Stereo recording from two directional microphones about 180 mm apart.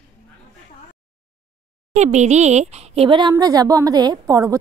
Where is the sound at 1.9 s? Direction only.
40° right (ahead or behind).